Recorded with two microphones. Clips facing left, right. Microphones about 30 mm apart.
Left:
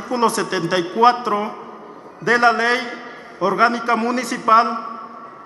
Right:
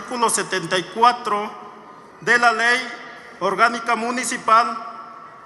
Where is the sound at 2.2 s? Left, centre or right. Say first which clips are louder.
Left 1 dB; right.